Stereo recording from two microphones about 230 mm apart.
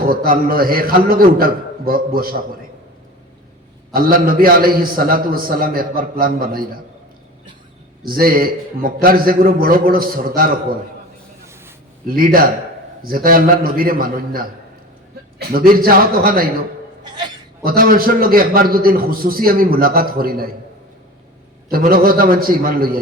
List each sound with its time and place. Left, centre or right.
0.0 s a man's voice: right
3.9 s a man's voice: right
8.0 s a man's voice: right
12.0 s a man's voice: right
17.6 s a man's voice: right
21.7 s a man's voice: right